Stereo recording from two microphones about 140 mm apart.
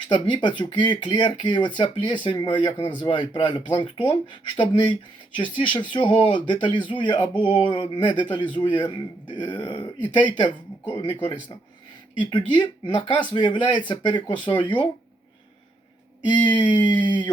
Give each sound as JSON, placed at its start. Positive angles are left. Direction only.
{"t": 0.1, "sound": "speech", "side_deg": 35}
{"t": 16.2, "sound": "speech", "side_deg": 35}